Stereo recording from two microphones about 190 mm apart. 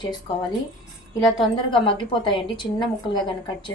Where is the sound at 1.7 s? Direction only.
25° left (ahead or behind).